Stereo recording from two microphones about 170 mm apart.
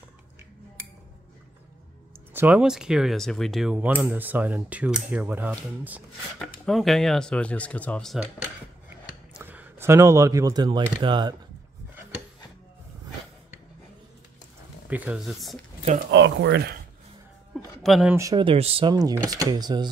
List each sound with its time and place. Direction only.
2.3 s speech: 10° right (ahead or behind)
6.6 s speech: centre (ahead or behind)
9.3 s speech: 10° right (ahead or behind); by 11.3 s 25° right (ahead or behind)
14.9 s speech: 10° right (ahead or behind)
16.1 s speech: 90° right
17.8 s speech: centre (ahead or behind)
18.1 s speech: 20° right (ahead or behind)
18.4 s speech: 35° right (ahead or behind)